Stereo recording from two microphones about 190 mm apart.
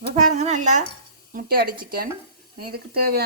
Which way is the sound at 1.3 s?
50° right (ahead or behind).